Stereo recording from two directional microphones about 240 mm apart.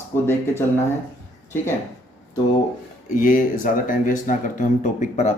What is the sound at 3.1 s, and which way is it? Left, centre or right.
Speech, left.